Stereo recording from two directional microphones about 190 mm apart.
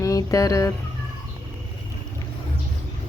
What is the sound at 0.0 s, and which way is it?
Fowl, 15° left (ahead or behind).